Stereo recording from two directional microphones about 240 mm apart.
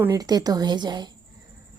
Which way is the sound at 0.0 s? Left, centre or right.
Centre.